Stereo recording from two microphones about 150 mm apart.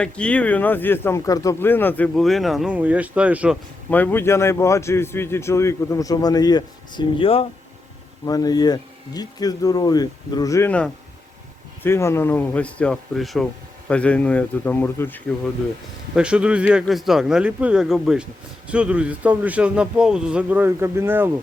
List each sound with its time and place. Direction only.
0.0 s speech: 10° left (ahead or behind)
2.1 s a man's voice: centre (ahead or behind)
3.8 s speech: 10° left (ahead or behind); by 7.4 s 35° left (ahead or behind)
8.2 s speech: 25° left (ahead or behind)
10.7 s speech: 10° left (ahead or behind)
16.1 s a man's voice: 5° right (ahead or behind)